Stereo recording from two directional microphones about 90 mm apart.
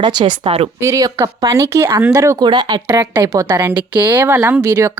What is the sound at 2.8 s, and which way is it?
Speech, 30° right (ahead or behind).